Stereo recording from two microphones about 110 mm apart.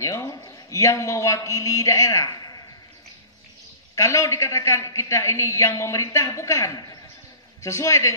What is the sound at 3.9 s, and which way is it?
A man's voice, 30° left (ahead or behind).